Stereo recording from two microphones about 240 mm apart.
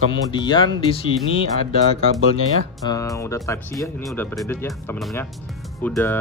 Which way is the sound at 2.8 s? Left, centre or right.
Centre.